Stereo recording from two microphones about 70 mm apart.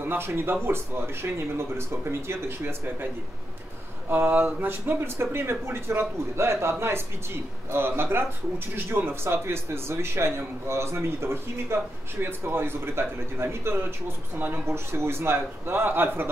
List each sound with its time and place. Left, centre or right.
0.0 s speech: right
4.1 s speech: right